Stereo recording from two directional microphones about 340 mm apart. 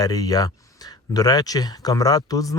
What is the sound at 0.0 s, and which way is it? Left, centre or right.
Speech, centre.